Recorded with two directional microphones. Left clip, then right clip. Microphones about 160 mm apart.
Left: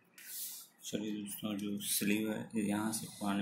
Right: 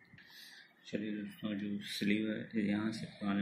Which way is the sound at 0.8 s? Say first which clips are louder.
Left 1 dB; 20° left (ahead or behind).